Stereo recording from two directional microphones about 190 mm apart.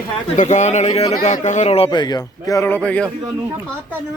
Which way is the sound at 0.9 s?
25° left (ahead or behind).